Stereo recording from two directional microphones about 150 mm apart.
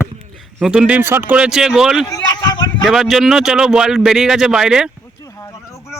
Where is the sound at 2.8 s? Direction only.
Centre (ahead or behind).